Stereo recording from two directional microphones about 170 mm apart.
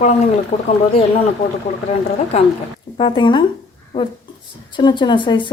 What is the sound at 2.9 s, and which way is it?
Speech, 30° left (ahead or behind).